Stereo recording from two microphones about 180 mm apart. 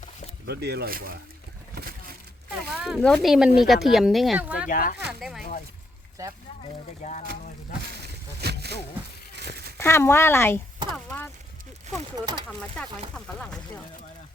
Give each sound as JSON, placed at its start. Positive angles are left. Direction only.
{"t": 0.4, "sound": "speech", "side_deg": -65}
{"t": 2.7, "sound": "speech", "side_deg": -5}
{"t": 4.7, "sound": "speech", "side_deg": 50}
{"t": 6.2, "sound": "speech", "side_deg": -20}
{"t": 7.0, "sound": "speech", "side_deg": 40}
{"t": 8.0, "sound": "a sound", "side_deg": -65}
{"t": 9.3, "sound": "crumpling", "side_deg": -65}
{"t": 9.7, "sound": "speech", "side_deg": 15}
{"t": 12.5, "sound": "speech", "side_deg": 5}